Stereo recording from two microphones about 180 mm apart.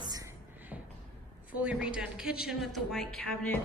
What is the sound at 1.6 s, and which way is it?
Speech, 5° right (ahead or behind).